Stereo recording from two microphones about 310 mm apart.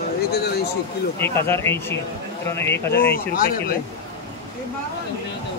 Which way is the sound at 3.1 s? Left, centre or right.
Left.